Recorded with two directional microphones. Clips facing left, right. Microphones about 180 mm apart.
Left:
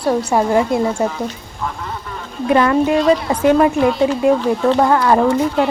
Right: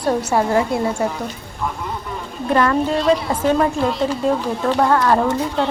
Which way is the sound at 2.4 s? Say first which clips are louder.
Left 3 dB; 10° left (ahead or behind).